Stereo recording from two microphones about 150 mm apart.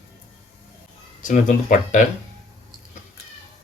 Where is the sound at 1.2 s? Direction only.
60° left (ahead or behind).